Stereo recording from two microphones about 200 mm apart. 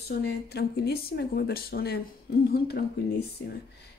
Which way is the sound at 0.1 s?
50° left (ahead or behind).